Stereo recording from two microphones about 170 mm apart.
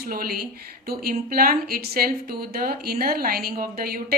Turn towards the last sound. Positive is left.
turn(degrees=-60)  # may be behind; listen again after turning